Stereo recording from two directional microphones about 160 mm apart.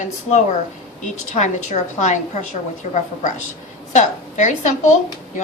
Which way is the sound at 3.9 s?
50° left (ahead or behind).